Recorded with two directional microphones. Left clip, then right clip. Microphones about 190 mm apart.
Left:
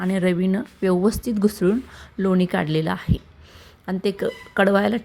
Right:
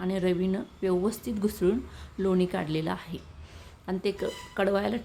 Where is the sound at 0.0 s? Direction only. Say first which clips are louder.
Left 6 dB; 30° left (ahead or behind).